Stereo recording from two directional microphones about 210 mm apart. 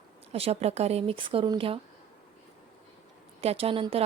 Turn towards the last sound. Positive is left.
turn(degrees=-25)  # may be behind; listen again after turning